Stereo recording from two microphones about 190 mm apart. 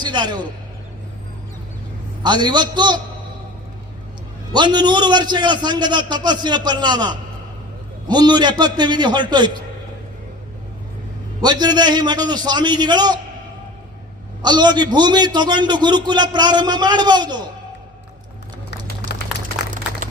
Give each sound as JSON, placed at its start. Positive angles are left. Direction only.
{"t": 0.0, "sound": "a sound", "side_deg": -25}
{"t": 2.2, "sound": "a man's voice", "side_deg": -25}
{"t": 4.5, "sound": "a man's voice", "side_deg": -25}
{"t": 11.3, "sound": "a man's voice", "side_deg": -20}
{"t": 14.4, "sound": "a man's voice", "side_deg": -25}